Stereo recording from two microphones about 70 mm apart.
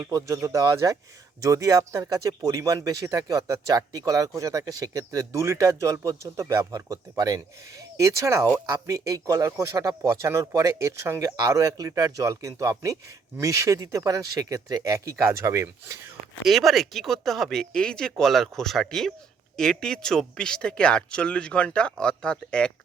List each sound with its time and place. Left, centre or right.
0.2 s speech: right
11.3 s speech: right
14.9 s speech: right
16.4 s speech: centre